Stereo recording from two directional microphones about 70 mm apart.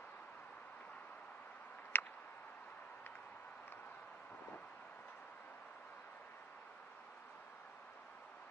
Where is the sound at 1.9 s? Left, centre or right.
Left.